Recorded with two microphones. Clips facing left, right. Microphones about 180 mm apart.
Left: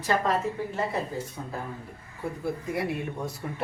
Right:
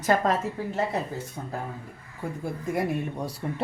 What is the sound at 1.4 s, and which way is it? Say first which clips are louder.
Speech: right 1 dB; 35° right (ahead or behind).